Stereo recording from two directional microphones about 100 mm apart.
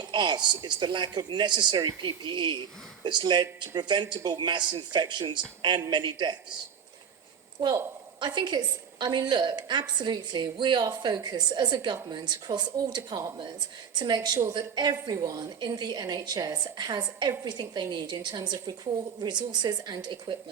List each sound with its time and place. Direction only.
0.0 s a woman's voice: 50° right (ahead or behind)
8.2 s a woman's voice: 50° right (ahead or behind)